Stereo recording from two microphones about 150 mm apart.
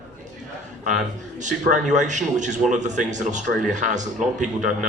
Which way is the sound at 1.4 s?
55° right (ahead or behind).